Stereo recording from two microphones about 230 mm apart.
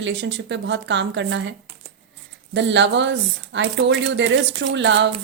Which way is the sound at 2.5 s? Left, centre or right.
Right.